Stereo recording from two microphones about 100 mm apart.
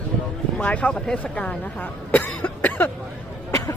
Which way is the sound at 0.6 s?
15° left (ahead or behind).